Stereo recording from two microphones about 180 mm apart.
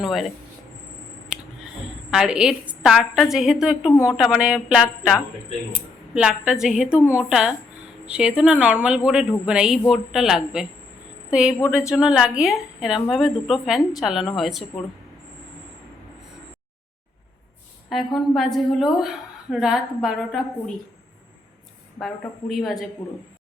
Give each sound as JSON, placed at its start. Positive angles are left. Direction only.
{"t": 0.0, "sound": "a woman's voice", "side_deg": 0}
{"t": 1.8, "sound": "a woman's voice", "side_deg": -5}
{"t": 3.9, "sound": "speech", "side_deg": 15}
{"t": 4.2, "sound": "a woman's voice", "side_deg": -5}
{"t": 17.8, "sound": "a woman's voice", "side_deg": 0}
{"t": 22.0, "sound": "a woman's voice", "side_deg": 0}